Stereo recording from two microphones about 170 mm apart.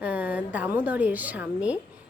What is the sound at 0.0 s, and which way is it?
A woman's voice, 10° right (ahead or behind).